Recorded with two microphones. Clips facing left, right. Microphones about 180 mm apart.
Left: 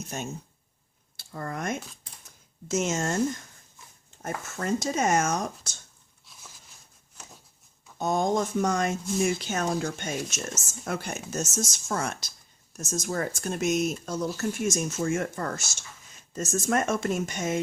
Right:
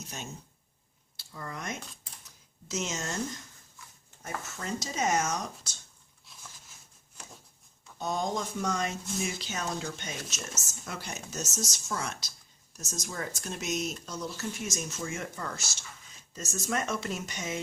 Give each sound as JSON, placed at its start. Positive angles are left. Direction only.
{"t": 0.1, "sound": "speech", "side_deg": 50}
{"t": 2.2, "sound": "a sound", "side_deg": 50}
{"t": 3.8, "sound": "dog", "side_deg": 20}
{"t": 4.2, "sound": "speech", "side_deg": 50}
{"t": 7.9, "sound": "speech", "side_deg": 50}